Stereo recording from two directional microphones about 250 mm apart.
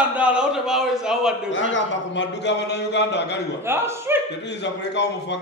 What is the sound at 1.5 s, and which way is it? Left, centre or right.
A man's voice, left.